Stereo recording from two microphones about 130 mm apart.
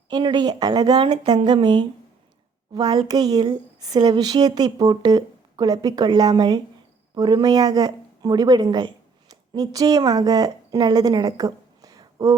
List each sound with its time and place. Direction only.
0.1 s speech: 35° right (ahead or behind)